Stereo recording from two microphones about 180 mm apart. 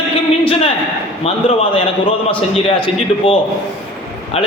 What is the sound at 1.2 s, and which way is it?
A man's voice, 35° left (ahead or behind).